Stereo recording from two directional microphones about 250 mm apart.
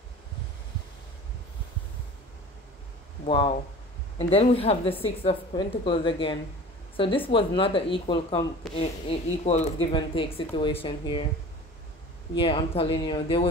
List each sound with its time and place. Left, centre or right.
3.3 s a woman's voice: centre
12.4 s a woman's voice: left